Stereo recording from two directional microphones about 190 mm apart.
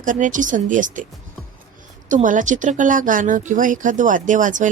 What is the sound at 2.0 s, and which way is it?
A woman's voice, 45° right (ahead or behind).